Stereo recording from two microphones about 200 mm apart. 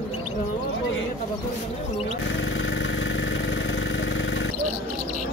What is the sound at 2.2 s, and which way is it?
Vehicle, 70° left (ahead or behind).